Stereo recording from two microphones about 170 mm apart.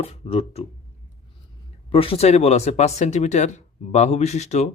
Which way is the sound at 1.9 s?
35° left (ahead or behind).